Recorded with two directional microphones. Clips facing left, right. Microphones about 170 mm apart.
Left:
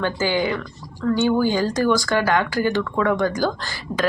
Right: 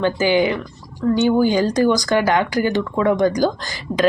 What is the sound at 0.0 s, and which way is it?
A woman's voice, 15° right (ahead or behind).